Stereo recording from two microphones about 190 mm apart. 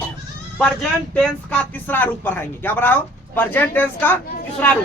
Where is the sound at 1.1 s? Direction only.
5° left (ahead or behind).